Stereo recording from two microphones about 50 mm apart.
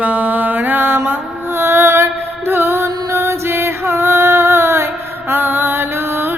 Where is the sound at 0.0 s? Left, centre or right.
Right.